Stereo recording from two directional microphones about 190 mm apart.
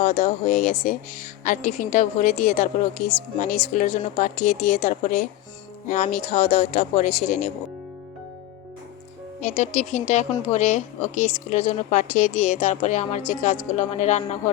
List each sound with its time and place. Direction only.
0.0 s a woman's voice: 40° left (ahead or behind)
9.4 s a woman's voice: 40° left (ahead or behind)